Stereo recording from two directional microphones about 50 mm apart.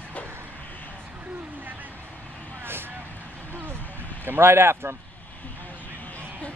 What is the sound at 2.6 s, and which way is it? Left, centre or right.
Vehicle, right.